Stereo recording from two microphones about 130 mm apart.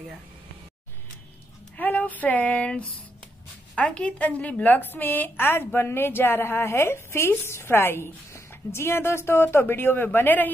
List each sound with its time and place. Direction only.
1.8 s female singing: 15° left (ahead or behind)
3.7 s a woman's voice: 10° left (ahead or behind)